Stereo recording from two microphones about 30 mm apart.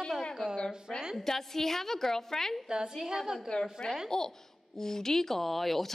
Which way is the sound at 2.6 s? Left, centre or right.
Right.